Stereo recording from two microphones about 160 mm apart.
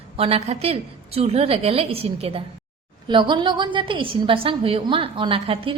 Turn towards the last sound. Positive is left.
turn(degrees=-35)  # may be behind; listen again after turning